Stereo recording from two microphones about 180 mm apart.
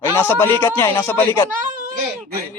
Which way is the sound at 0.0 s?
15° left (ahead or behind).